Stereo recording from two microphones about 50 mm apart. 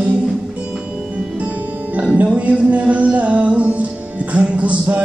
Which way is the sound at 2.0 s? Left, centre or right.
Right.